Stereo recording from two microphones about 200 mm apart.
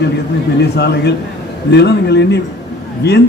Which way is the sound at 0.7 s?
55° left (ahead or behind).